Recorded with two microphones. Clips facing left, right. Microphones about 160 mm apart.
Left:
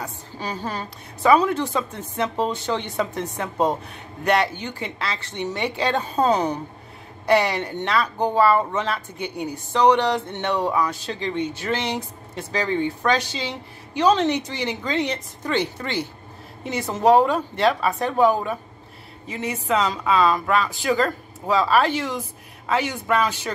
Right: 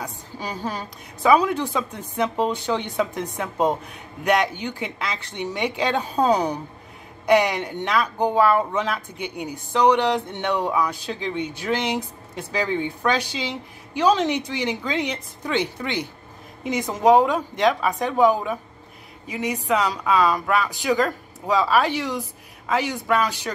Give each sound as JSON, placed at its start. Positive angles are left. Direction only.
{"t": 0.0, "sound": "speech", "side_deg": -10}
{"t": 21.5, "sound": "speech", "side_deg": -10}